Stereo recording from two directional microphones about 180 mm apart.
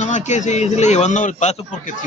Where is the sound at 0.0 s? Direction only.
40° left (ahead or behind).